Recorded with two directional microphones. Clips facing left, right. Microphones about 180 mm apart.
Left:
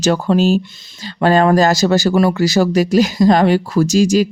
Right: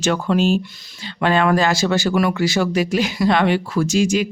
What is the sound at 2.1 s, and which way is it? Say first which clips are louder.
Speech: left 4 dB; 30° left (ahead or behind).